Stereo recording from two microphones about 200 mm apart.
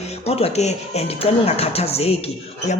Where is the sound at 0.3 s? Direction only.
30° left (ahead or behind).